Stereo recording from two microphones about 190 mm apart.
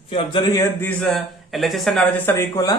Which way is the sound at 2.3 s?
15° left (ahead or behind).